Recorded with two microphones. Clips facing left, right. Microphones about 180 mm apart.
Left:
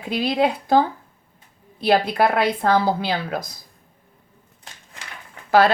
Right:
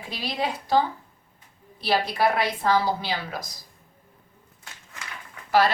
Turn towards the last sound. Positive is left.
turn(degrees=60)  # may be behind; listen again after turning